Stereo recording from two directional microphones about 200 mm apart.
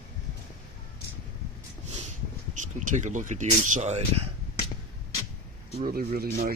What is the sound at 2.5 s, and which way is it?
Speech, 35° right (ahead or behind).